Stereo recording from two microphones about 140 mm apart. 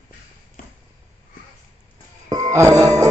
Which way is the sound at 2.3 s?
25° right (ahead or behind).